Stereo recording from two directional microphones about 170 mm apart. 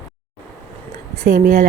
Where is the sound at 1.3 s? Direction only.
60° right (ahead or behind).